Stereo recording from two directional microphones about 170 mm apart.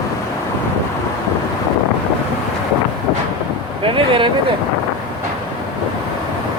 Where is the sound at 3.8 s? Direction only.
30° right (ahead or behind).